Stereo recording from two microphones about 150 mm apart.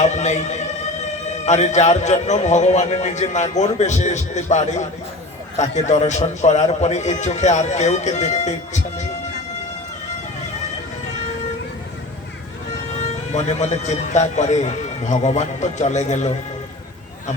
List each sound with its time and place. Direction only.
0.0 s a sound: 50° left (ahead or behind)
1.5 s a man's voice: 50° left (ahead or behind)
13.0 s a man's voice: 50° left (ahead or behind)